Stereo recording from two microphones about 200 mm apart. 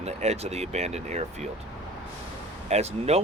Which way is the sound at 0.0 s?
35° right (ahead or behind).